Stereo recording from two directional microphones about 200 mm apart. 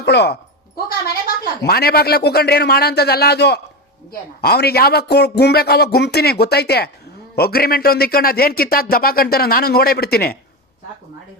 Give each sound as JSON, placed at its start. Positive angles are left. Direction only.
{"t": 0.0, "sound": "speech", "side_deg": 55}
{"t": 1.6, "sound": "speech", "side_deg": 50}